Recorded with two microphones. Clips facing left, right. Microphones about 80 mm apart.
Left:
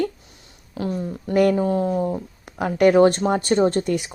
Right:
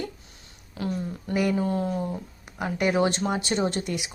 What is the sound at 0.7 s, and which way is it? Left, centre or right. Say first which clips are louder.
Speech: left 4 dB; left.